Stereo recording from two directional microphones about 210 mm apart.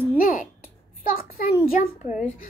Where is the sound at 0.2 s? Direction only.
40° left (ahead or behind).